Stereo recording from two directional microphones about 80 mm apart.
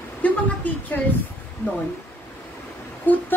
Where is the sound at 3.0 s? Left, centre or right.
Left.